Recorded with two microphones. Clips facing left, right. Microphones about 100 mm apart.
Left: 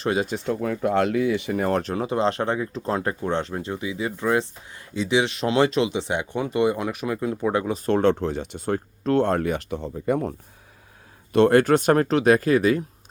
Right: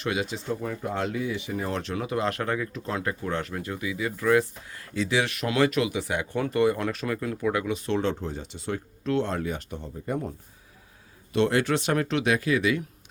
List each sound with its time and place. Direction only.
0.0 s speech: 35° left (ahead or behind)
0.3 s speech: 65° left (ahead or behind)
1.8 s speech: 35° left (ahead or behind)
7.9 s speech: 55° left (ahead or behind)
8.6 s speech: 45° left (ahead or behind); by 10.3 s 80° left
11.3 s speech: 50° left (ahead or behind)